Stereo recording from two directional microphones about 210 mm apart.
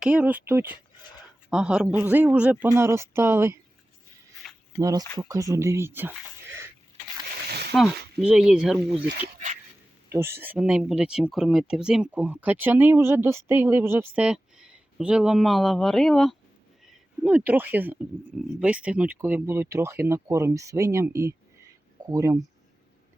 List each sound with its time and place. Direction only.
0.0 s speech: 5° right (ahead or behind)
4.4 s a sound: centre (ahead or behind)
4.8 s speech: 15° right (ahead or behind)
7.7 s speech: centre (ahead or behind)
10.1 s speech: 10° right (ahead or behind)